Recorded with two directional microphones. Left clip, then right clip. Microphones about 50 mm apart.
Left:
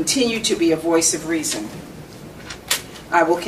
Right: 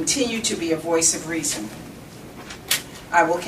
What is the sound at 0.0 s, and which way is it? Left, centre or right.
A woman's voice, left.